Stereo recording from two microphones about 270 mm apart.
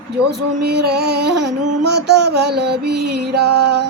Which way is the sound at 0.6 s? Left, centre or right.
Right.